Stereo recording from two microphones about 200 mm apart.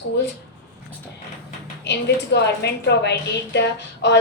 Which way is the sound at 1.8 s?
60° left (ahead or behind).